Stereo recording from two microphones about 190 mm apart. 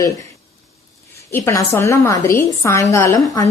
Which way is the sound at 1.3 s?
15° left (ahead or behind).